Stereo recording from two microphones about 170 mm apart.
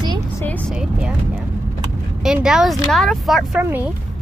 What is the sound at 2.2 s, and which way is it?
A woman's voice, 5° right (ahead or behind).